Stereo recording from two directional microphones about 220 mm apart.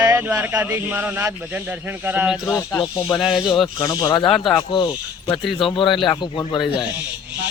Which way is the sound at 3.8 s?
15° left (ahead or behind).